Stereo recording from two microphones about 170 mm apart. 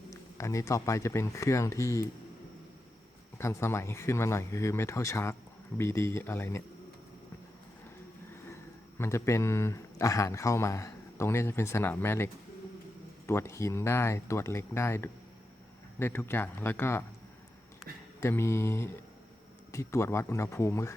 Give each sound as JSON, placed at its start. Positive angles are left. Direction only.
{"t": 0.1, "sound": "speech", "side_deg": 20}
{"t": 3.3, "sound": "speech", "side_deg": 15}
{"t": 9.0, "sound": "speech", "side_deg": 15}
{"t": 18.2, "sound": "speech", "side_deg": 15}